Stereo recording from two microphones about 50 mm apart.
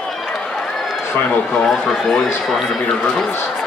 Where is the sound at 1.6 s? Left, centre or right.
Centre.